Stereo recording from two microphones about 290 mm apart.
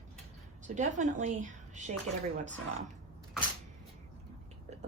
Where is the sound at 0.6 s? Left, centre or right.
Right.